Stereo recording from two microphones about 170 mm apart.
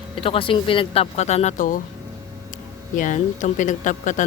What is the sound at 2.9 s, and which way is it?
Speech, 50° left (ahead or behind).